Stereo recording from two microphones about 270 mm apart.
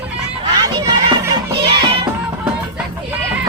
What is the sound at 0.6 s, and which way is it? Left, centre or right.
Music, centre.